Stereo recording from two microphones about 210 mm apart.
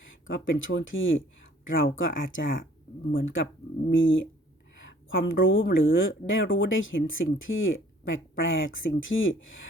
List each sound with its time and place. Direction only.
0.3 s speech: 65° left (ahead or behind)